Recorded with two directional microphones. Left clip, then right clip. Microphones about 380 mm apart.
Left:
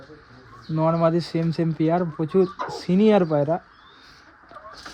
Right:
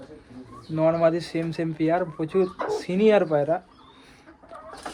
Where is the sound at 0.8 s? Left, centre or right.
Centre.